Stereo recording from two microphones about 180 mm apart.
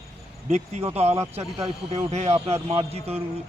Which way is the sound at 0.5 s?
40° right (ahead or behind).